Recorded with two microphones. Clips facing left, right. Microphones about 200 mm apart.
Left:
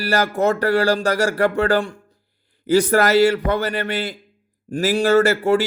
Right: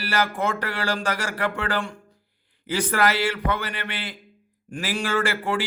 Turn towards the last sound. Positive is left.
turn(degrees=40)  # may be behind; listen again after turning